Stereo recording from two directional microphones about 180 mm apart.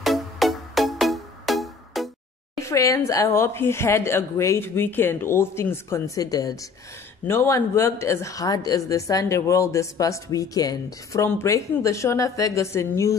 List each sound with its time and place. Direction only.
0.0 s music: centre (ahead or behind)
2.6 s a woman's voice: 15° left (ahead or behind)